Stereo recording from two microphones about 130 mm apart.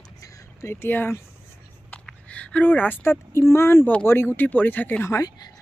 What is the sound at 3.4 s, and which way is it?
Speech, 20° left (ahead or behind).